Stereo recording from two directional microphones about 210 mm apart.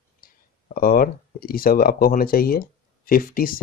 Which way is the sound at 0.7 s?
40° left (ahead or behind).